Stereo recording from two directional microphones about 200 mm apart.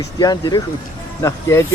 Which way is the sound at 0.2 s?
20° left (ahead or behind).